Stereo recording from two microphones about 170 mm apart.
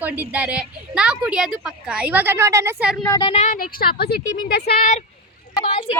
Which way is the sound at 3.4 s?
55° left (ahead or behind).